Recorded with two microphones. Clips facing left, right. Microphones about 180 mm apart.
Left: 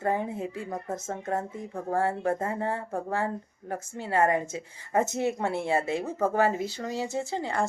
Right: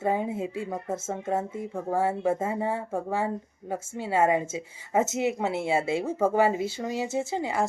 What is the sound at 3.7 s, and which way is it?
Speech, 25° right (ahead or behind).